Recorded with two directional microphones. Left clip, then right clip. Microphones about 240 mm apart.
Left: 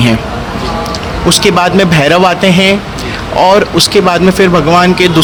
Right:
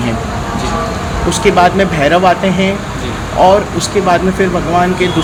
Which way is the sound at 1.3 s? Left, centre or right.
Left.